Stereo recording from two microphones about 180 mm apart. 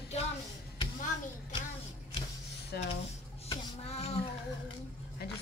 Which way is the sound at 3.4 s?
35° left (ahead or behind).